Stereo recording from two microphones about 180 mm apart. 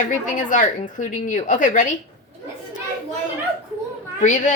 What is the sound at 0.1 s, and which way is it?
A woman's voice, 45° left (ahead or behind).